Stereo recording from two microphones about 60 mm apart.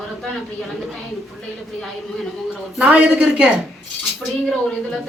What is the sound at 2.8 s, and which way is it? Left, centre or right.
Speech, centre.